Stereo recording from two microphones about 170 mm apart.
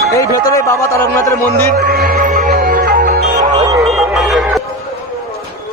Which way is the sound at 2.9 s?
65° right (ahead or behind).